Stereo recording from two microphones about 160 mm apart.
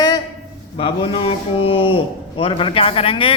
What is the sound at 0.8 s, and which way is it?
A man's voice, 35° left (ahead or behind).